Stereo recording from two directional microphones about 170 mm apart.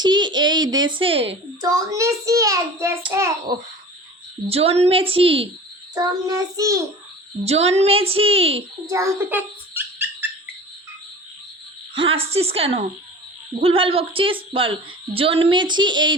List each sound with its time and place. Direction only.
0.0 s a child's voice: 25° right (ahead or behind)
1.6 s a child's voice: 20° right (ahead or behind)
4.4 s a woman's voice: 35° right (ahead or behind)
5.9 s a child's voice: 20° right (ahead or behind)
7.4 s a woman's voice: 35° right (ahead or behind)
8.9 s bird: 15° right (ahead or behind)
11.9 s a woman's voice: 35° right (ahead or behind)